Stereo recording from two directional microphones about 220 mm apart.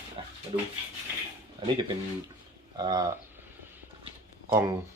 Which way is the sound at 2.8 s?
15° right (ahead or behind).